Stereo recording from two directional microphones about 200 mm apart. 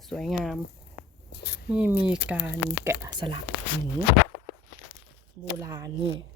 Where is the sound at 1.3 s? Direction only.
55° left (ahead or behind).